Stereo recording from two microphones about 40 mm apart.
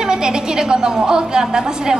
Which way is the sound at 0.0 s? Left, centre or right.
Centre.